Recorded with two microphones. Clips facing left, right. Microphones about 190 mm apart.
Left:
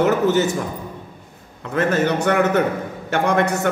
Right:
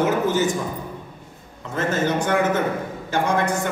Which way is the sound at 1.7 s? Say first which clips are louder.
Left 3 dB; 65° left (ahead or behind).